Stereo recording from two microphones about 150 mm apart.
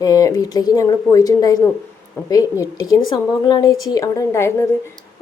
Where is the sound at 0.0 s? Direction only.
25° left (ahead or behind).